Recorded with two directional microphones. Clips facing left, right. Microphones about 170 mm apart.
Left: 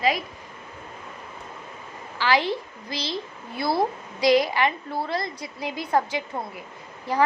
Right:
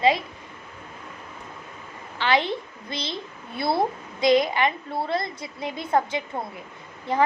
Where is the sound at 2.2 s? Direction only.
25° right (ahead or behind).